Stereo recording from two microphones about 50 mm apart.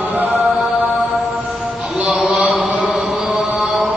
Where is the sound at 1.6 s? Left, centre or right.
Centre.